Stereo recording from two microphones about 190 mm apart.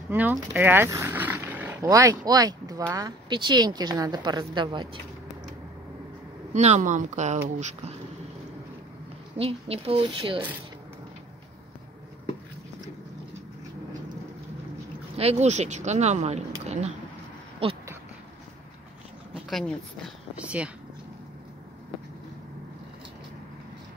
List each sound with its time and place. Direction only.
0.1 s speech: 10° right (ahead or behind)
6.5 s speech: 35° right (ahead or behind)
9.4 s speech: 30° right (ahead or behind)
15.1 s speech: 35° right (ahead or behind)
19.3 s a sound: centre (ahead or behind)
20.3 s speech: 5° right (ahead or behind)